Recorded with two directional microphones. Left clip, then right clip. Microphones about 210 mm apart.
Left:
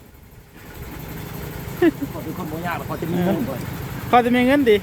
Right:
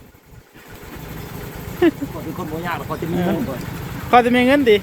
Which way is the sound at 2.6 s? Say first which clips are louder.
Right 1 dB; 15° left (ahead or behind).